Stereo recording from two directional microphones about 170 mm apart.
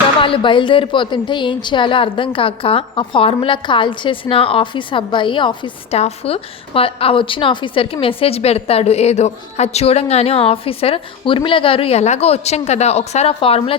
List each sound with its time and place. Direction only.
0.2 s a woman's voice: 30° left (ahead or behind)